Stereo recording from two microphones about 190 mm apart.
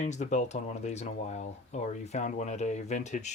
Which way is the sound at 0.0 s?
40° left (ahead or behind).